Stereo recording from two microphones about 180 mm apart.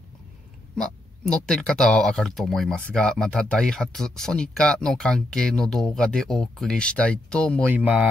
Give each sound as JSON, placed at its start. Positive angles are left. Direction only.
{"t": 0.7, "sound": "speech", "side_deg": 5}
{"t": 7.7, "sound": "speech", "side_deg": -10}